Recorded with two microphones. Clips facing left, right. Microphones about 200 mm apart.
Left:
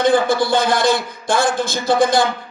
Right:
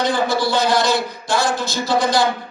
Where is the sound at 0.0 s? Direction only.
55° left (ahead or behind).